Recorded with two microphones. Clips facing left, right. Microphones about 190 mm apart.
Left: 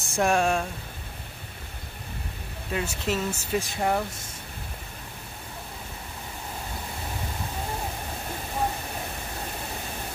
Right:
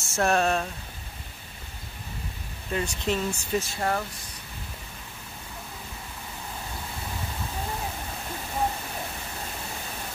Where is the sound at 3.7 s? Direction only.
15° left (ahead or behind).